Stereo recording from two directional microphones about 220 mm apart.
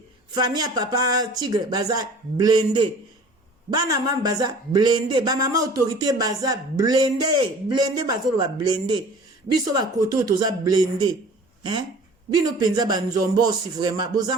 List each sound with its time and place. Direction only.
0.3 s speech: 20° right (ahead or behind)